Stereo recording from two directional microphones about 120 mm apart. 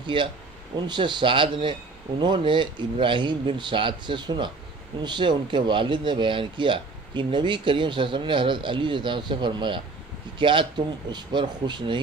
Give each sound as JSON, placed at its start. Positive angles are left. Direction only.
{"t": 0.0, "sound": "speech", "side_deg": -45}